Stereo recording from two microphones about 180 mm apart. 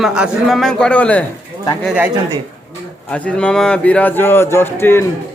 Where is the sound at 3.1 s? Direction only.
5° left (ahead or behind).